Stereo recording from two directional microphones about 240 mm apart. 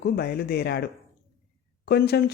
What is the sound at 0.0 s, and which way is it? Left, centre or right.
Speech, left.